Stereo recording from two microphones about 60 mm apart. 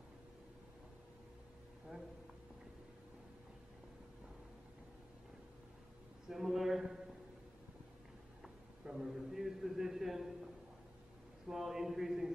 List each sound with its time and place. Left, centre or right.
6.2 s a man's voice: centre
8.4 s a sound: centre
11.4 s a man's voice: centre